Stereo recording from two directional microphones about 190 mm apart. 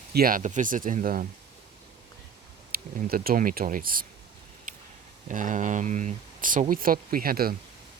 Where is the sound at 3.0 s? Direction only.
50° right (ahead or behind).